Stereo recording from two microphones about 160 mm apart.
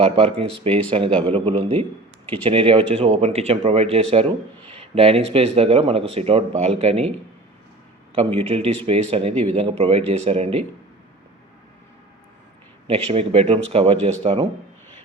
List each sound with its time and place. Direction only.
0.0 s speech: 35° right (ahead or behind)
8.1 s speech: 40° right (ahead or behind)
12.9 s speech: 35° right (ahead or behind)